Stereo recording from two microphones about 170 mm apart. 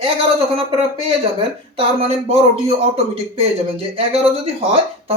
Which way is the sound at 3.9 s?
35° right (ahead or behind).